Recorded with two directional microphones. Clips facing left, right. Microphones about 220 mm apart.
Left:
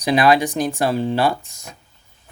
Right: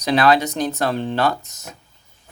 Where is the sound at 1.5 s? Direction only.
10° left (ahead or behind).